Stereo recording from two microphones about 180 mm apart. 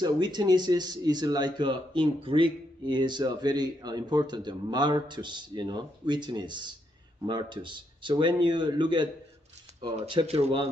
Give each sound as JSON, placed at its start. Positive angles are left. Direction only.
{"t": 0.0, "sound": "a man's voice", "side_deg": -25}